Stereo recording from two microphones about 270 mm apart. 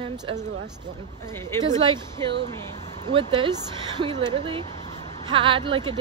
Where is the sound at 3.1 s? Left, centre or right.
Centre.